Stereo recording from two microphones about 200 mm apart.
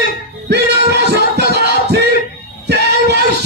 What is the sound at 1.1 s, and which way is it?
Music, 55° right (ahead or behind).